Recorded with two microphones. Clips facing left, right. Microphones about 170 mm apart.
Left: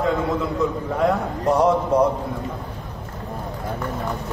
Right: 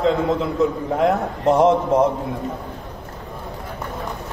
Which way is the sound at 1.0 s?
25° right (ahead or behind).